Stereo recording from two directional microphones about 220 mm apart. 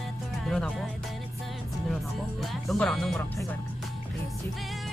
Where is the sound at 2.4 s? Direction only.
5° left (ahead or behind).